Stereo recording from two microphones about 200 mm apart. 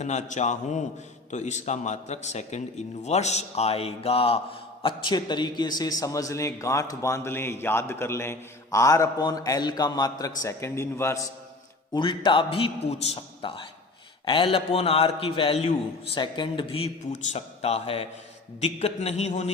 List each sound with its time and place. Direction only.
0.0 s a man's voice: 35° left (ahead or behind); by 11.2 s 15° left (ahead or behind)
11.9 s a man's voice: 25° left (ahead or behind)